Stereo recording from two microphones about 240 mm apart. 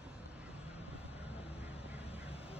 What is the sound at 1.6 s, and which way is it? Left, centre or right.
Vehicle, centre.